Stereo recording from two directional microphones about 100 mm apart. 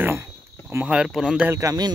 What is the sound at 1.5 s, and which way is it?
Speech, 35° right (ahead or behind).